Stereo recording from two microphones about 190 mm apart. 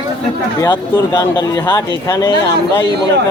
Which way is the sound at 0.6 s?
15° left (ahead or behind).